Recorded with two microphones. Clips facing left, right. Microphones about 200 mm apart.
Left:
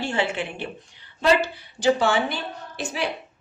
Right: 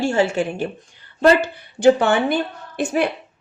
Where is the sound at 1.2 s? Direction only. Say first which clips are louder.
Right 5 dB; 55° right (ahead or behind).